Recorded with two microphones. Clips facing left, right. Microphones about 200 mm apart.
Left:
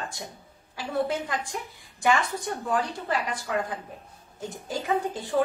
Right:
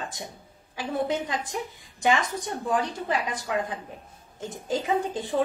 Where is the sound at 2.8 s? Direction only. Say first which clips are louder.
Right 1 dB; 15° right (ahead or behind).